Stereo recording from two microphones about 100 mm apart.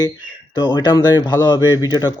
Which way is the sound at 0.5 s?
50° left (ahead or behind).